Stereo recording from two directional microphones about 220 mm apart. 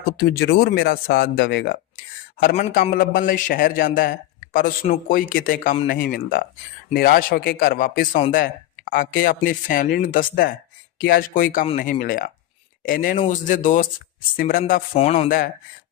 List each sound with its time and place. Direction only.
0.3 s speech: 45° left (ahead or behind)
2.4 s a man's voice: 35° left (ahead or behind)
14.9 s a man's voice: 30° left (ahead or behind)